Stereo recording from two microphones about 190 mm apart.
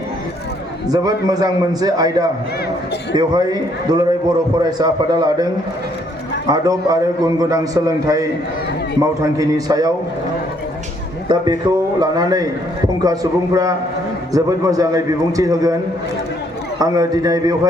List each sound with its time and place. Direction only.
0.9 s a man's voice: 20° right (ahead or behind)
6.5 s a man's voice: 20° right (ahead or behind)
11.3 s a man's voice: 25° right (ahead or behind)
16.8 s a man's voice: 20° right (ahead or behind)